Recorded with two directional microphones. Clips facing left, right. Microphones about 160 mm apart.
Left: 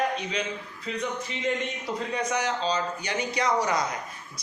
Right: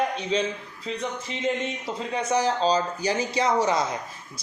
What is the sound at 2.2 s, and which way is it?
A man's voice, 30° right (ahead or behind).